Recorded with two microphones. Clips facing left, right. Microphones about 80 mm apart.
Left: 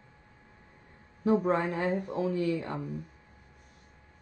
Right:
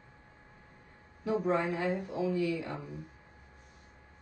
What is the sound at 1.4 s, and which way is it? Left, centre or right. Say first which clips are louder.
Speech: left 2 dB; left.